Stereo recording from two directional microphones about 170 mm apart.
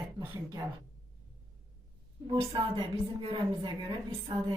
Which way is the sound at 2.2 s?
25° right (ahead or behind).